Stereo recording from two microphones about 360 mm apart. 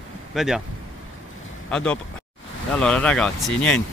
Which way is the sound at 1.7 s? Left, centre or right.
Centre.